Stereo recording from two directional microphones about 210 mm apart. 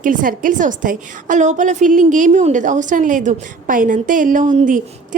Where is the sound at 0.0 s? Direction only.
40° right (ahead or behind).